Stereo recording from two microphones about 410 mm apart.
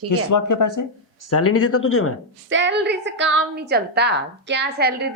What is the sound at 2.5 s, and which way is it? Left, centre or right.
A woman's voice, right.